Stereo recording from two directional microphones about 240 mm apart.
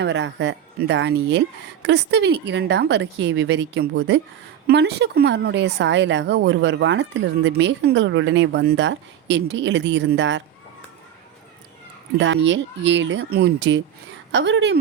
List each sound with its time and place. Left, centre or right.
0.0 s speech: right
12.5 s speech: right